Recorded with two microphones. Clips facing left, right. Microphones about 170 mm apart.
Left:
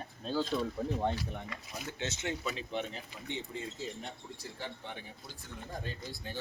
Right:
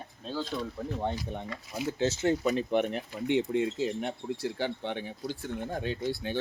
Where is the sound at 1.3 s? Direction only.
30° right (ahead or behind).